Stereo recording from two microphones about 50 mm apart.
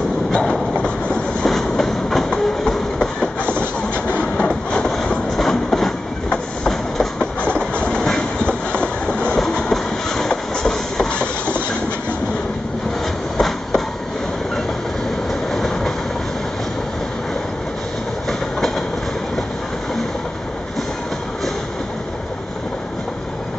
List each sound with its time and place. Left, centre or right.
0.3 s train: centre
1.5 s train: centre
11.1 s train: left
13.4 s a sound: centre
15.5 s train: centre